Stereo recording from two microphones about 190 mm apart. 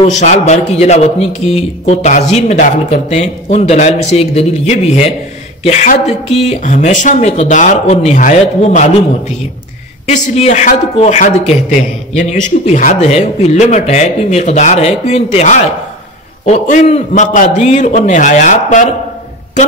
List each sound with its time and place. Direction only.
0.0 s a man's voice: 35° left (ahead or behind)
10.0 s a man's voice: 35° left (ahead or behind)